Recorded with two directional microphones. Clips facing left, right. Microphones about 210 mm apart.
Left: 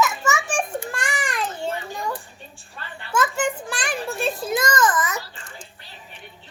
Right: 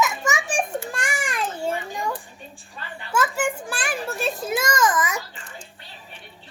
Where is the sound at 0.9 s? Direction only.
10° right (ahead or behind).